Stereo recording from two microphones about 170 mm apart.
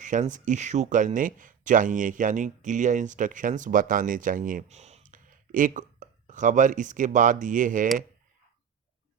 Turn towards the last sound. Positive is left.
turn(degrees=-50)  # may be behind; listen again after turning